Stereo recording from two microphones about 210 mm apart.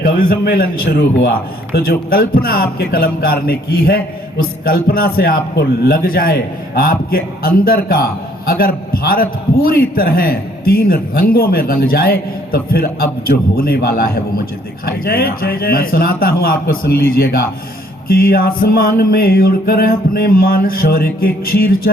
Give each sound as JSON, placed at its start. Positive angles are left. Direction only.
{"t": 0.0, "sound": "a man's voice", "side_deg": 45}